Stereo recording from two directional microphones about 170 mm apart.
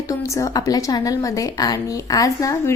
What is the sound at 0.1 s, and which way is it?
A woman's voice, 20° left (ahead or behind).